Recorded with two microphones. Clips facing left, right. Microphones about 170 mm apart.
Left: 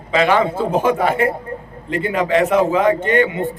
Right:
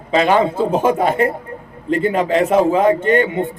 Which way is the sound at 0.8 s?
25° right (ahead or behind).